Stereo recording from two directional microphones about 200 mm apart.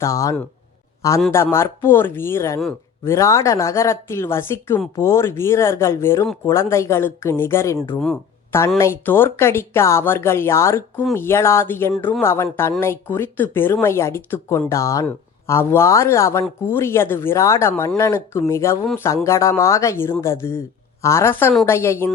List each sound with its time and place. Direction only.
0.0 s speech: 15° left (ahead or behind)
3.1 s speech: 15° left (ahead or behind)